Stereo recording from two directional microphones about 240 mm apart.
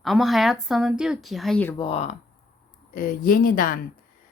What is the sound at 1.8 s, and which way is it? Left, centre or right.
Speech, left.